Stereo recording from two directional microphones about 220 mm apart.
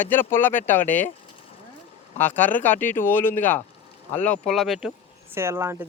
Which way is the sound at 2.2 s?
10° left (ahead or behind).